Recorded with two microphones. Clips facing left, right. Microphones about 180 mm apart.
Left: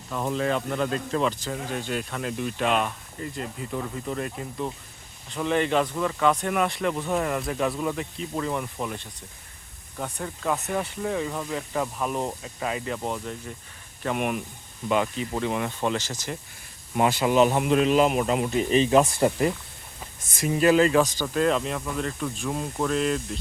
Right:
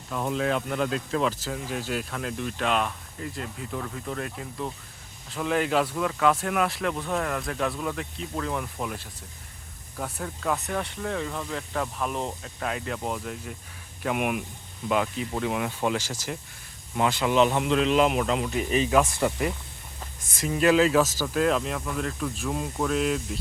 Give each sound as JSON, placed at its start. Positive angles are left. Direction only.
{"t": 0.1, "sound": "speech", "side_deg": 0}
{"t": 17.1, "sound": "a man's voice", "side_deg": 10}
{"t": 18.4, "sound": "speech", "side_deg": 25}
{"t": 20.4, "sound": "speech", "side_deg": 5}